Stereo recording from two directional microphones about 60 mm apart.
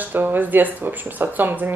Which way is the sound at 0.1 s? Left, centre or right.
Right.